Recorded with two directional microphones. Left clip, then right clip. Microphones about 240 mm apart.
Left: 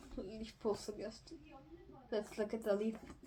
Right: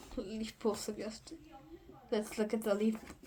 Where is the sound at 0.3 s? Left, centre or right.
Right.